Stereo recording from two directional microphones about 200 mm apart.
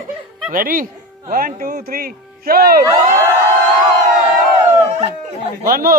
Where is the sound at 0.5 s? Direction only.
45° right (ahead or behind).